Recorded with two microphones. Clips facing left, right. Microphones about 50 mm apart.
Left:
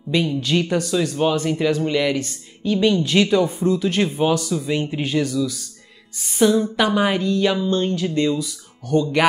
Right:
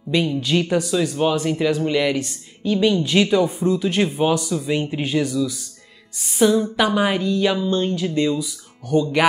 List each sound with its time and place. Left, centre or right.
0.1 s speech: centre
5.0 s speech: centre
6.1 s speech: centre